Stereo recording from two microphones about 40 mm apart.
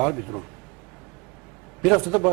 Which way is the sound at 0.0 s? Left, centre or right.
Centre.